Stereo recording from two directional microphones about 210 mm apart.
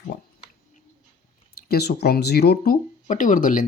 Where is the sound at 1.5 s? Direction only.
45° left (ahead or behind).